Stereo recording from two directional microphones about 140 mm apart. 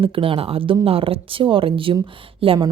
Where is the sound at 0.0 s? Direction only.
40° right (ahead or behind).